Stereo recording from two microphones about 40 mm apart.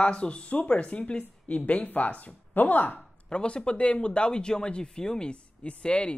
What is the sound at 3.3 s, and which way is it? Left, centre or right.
Speech, left.